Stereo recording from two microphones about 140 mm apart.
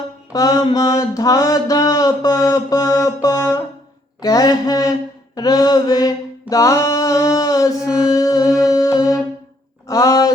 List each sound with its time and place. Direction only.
0.3 s mantra: 25° left (ahead or behind)
8.6 s music: 25° left (ahead or behind)
9.8 s a sound: 25° left (ahead or behind)